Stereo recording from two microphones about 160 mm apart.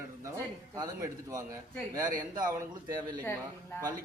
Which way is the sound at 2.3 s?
25° right (ahead or behind).